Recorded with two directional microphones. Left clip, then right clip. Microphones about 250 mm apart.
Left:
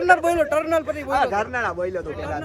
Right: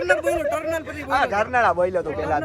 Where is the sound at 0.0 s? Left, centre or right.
Left.